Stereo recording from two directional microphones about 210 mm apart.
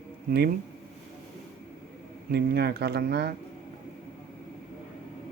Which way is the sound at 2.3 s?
50° right (ahead or behind).